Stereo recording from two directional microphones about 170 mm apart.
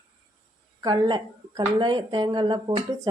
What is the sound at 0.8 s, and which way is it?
A woman's voice, 25° right (ahead or behind).